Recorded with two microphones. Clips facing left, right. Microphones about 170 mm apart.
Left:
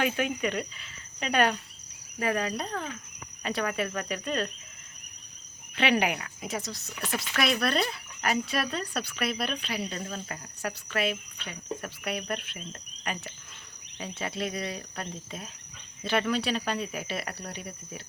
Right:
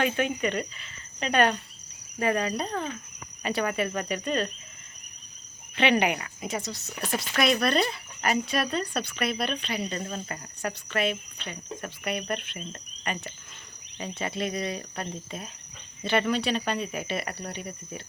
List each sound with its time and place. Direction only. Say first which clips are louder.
0.0 s speech: right 2 dB; 5° left (ahead or behind)
5.7 s speech: right 2 dB; 5° left (ahead or behind)
7.0 s speech: right 3 dB; 20° right (ahead or behind)
7.3 s speech: right 3 dB; centre (ahead or behind)
14.2 s speech: right 2 dB; centre (ahead or behind)
16.0 s speech: right 2 dB; centre (ahead or behind)